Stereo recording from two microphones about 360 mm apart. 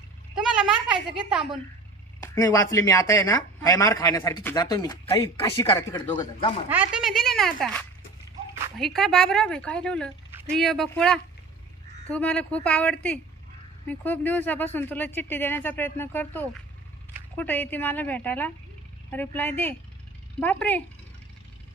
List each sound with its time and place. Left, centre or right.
0.3 s a child's voice: centre
2.1 s speech: centre
6.7 s speech: centre